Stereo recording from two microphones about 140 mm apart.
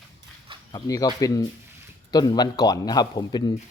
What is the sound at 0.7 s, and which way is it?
Speech, 25° left (ahead or behind).